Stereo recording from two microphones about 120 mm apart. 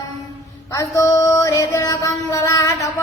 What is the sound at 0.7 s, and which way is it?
Mantra, 25° left (ahead or behind).